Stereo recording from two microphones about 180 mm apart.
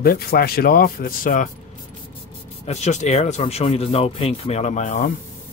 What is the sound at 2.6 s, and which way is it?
Speech, 40° left (ahead or behind).